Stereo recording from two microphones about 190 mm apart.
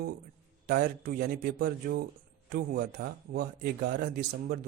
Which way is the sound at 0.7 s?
50° right (ahead or behind).